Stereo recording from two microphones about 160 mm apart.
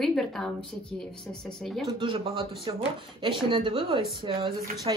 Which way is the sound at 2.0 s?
30° right (ahead or behind).